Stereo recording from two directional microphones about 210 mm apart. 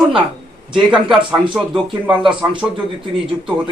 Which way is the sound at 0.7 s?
5° right (ahead or behind).